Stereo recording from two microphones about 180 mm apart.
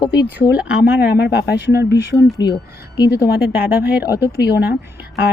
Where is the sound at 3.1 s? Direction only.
60° left (ahead or behind).